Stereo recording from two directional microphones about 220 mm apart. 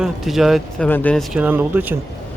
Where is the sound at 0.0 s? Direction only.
Centre (ahead or behind).